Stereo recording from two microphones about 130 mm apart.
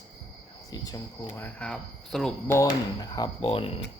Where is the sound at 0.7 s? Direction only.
25° left (ahead or behind); by 2.3 s 5° left (ahead or behind).